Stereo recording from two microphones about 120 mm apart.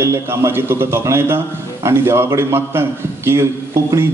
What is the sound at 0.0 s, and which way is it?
A man's voice, 25° right (ahead or behind).